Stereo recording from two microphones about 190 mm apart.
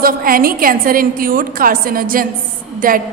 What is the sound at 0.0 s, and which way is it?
A woman's voice, 50° right (ahead or behind).